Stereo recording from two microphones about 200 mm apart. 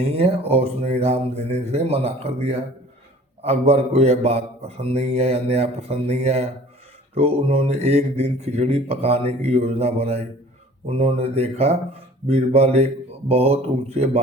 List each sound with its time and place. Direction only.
0.1 s speech: 30° right (ahead or behind)